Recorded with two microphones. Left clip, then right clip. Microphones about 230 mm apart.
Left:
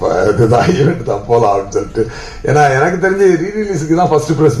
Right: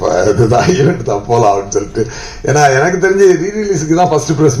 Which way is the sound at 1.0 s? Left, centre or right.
Right.